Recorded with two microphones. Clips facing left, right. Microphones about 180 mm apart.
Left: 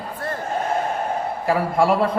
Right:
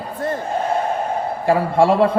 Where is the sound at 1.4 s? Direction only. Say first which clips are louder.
Right 4 dB; 30° right (ahead or behind).